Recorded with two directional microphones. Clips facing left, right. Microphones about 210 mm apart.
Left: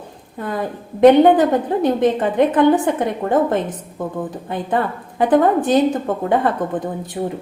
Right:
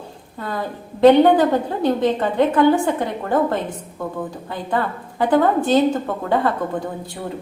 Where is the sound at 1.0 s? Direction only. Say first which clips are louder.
Left 2 dB; 20° left (ahead or behind).